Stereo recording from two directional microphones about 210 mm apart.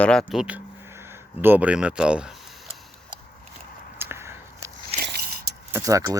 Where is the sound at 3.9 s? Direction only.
10° right (ahead or behind).